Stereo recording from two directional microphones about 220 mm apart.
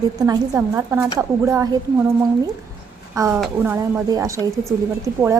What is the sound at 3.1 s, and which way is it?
A woman's voice, 15° right (ahead or behind).